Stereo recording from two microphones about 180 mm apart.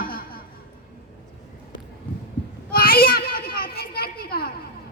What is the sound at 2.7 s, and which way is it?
Children playing, 55° left (ahead or behind).